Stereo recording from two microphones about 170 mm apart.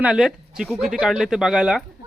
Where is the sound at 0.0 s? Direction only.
5° right (ahead or behind).